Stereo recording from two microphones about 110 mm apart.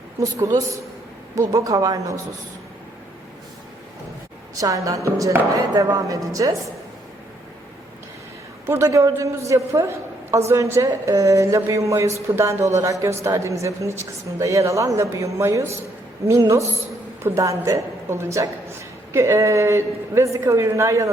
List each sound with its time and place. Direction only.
0.2 s a woman's voice: 30° right (ahead or behind)
4.5 s a woman's voice: 30° right (ahead or behind)
8.6 s speech: 25° right (ahead or behind)